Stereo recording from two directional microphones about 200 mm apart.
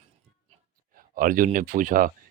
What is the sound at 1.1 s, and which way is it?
Speech, 40° right (ahead or behind).